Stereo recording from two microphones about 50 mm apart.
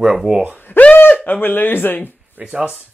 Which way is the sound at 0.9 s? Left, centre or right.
Left.